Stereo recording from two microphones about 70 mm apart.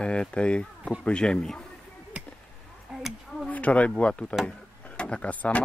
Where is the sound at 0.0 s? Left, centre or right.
Centre.